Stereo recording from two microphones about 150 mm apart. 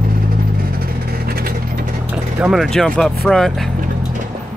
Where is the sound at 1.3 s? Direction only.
90° right.